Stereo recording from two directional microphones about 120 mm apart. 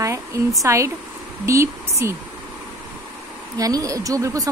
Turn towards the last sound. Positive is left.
turn(degrees=-30)  # may be behind; listen again after turning